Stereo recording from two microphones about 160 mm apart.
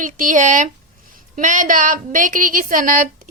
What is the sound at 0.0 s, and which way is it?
A woman's voice, 55° right (ahead or behind).